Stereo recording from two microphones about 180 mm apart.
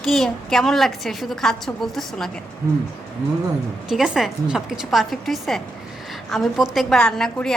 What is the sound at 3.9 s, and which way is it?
A woman's voice, centre (ahead or behind).